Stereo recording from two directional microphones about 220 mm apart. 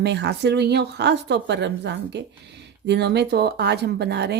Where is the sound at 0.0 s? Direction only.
50° right (ahead or behind).